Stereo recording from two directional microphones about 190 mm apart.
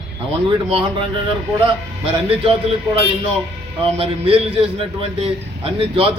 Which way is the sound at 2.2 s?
30° right (ahead or behind).